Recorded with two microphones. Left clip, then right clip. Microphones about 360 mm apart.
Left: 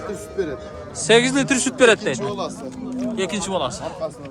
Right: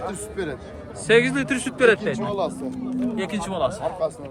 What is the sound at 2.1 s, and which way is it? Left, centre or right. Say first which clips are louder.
Speech: right 1 dB; right.